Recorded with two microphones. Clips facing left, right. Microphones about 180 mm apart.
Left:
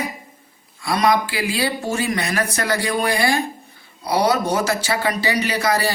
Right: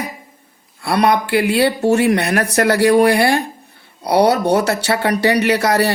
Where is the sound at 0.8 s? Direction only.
65° right (ahead or behind).